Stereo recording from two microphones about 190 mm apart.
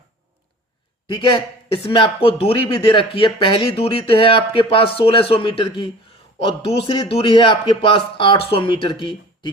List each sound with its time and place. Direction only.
1.0 s speech: 25° left (ahead or behind)